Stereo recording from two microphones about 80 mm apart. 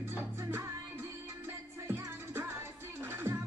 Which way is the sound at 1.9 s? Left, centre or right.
Right.